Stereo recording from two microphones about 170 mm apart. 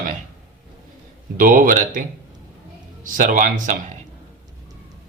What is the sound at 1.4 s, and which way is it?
Speech, 55° right (ahead or behind).